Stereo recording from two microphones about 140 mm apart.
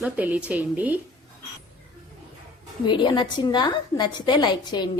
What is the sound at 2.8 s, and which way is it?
A woman's voice, 35° left (ahead or behind).